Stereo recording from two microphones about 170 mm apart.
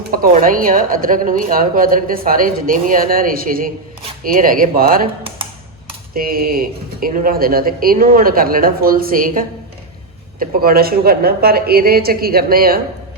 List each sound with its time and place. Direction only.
0.1 s speech: 55° right (ahead or behind)
6.1 s speech: 60° right (ahead or behind)